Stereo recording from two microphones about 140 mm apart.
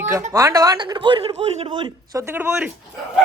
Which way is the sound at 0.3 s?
25° right (ahead or behind).